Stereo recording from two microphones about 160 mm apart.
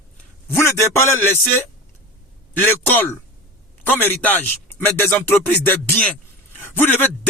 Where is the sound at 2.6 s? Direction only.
10° left (ahead or behind).